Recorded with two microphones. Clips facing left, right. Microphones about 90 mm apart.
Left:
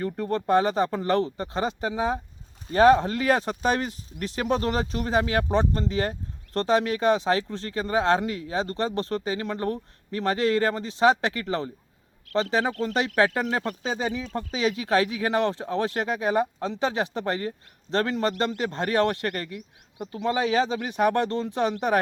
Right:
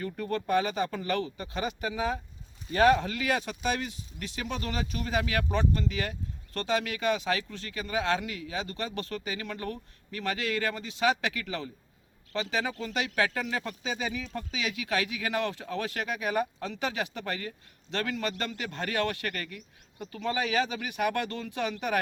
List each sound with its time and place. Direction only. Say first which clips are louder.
0.0 s speech: left 5 dB; 30° left (ahead or behind)